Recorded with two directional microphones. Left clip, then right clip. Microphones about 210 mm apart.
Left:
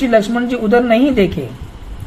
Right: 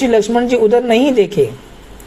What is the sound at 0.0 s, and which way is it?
A woman's voice, 20° right (ahead or behind).